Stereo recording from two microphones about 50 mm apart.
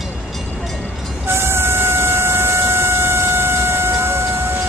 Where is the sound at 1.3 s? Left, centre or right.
Right.